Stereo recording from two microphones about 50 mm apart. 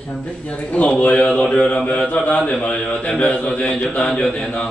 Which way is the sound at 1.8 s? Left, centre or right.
Left.